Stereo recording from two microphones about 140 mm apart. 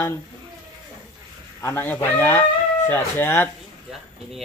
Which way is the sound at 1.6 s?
15° left (ahead or behind).